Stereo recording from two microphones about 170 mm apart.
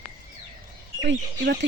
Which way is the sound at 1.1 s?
80° right.